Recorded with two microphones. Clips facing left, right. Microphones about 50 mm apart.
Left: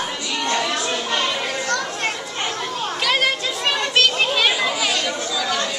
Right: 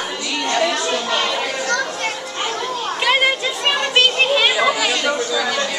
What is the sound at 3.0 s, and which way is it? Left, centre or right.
Children playing, centre.